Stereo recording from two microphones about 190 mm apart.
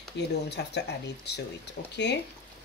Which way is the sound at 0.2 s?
65° left (ahead or behind).